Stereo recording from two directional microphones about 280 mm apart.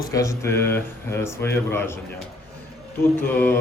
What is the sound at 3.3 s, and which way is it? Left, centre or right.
Speech, centre.